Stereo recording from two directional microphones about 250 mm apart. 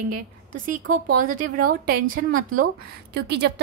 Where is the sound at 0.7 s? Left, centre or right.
Right.